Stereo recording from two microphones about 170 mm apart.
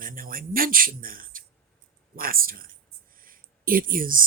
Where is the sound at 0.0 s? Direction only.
55° right (ahead or behind).